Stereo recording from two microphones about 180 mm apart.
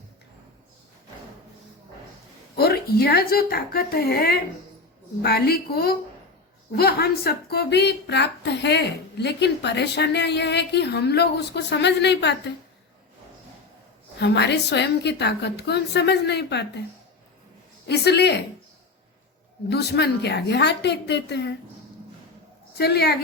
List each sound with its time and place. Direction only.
2.6 s a woman's voice: 60° left (ahead or behind)
14.2 s speech: 70° left (ahead or behind)
17.8 s a woman's voice: 65° left (ahead or behind)
19.7 s speech: 65° left (ahead or behind)
22.7 s a woman's voice: 65° left (ahead or behind)